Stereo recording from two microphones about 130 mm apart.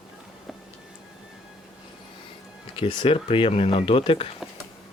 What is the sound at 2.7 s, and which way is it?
Speech, 45° left (ahead or behind).